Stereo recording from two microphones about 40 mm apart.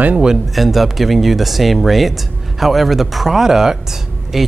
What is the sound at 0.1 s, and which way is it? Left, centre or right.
Speech, right.